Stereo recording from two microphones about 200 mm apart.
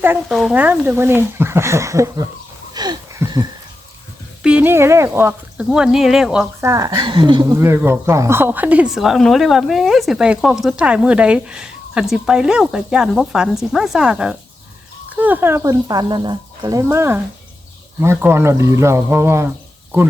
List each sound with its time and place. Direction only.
0.0 s speech: 10° right (ahead or behind)
2.7 s a sound: 20° right (ahead or behind)
4.4 s speech: 5° right (ahead or behind)
6.6 s speech: 15° right (ahead or behind)
7.6 s speech: 10° right (ahead or behind)